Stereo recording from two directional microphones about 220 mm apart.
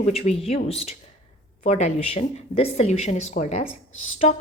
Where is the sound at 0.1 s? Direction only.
25° left (ahead or behind).